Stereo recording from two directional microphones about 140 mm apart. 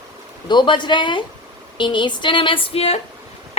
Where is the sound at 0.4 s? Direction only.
35° left (ahead or behind).